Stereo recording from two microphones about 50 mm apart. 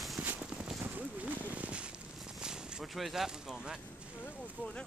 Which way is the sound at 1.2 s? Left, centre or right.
Right.